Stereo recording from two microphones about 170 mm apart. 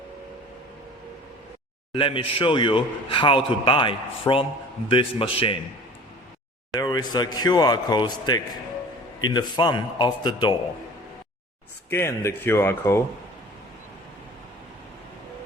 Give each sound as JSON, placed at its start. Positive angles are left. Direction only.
{"t": 1.9, "sound": "a man's voice", "side_deg": 30}
{"t": 6.7, "sound": "a man's voice", "side_deg": 25}
{"t": 11.9, "sound": "speech", "side_deg": 15}